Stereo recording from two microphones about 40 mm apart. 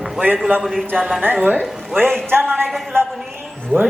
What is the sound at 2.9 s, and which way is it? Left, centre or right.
Speech, right.